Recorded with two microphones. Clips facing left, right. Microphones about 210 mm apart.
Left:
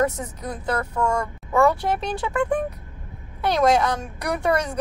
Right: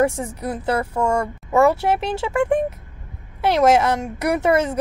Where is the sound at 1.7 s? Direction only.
25° right (ahead or behind).